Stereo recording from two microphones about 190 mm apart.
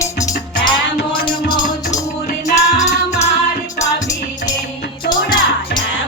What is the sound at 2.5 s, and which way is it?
Music, 35° left (ahead or behind).